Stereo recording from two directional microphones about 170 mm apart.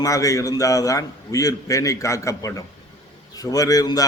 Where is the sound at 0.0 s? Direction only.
20° left (ahead or behind).